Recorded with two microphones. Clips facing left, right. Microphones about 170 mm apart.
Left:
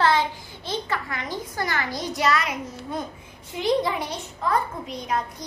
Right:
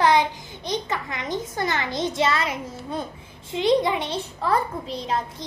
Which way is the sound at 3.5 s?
20° right (ahead or behind).